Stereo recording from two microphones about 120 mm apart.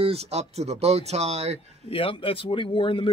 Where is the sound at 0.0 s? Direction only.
60° right (ahead or behind).